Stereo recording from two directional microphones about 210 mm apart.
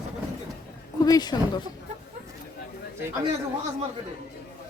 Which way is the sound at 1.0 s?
20° left (ahead or behind).